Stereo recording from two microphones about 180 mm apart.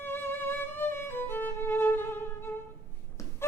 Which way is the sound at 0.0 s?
10° left (ahead or behind).